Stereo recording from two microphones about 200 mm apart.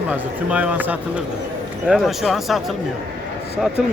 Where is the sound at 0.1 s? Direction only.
5° right (ahead or behind).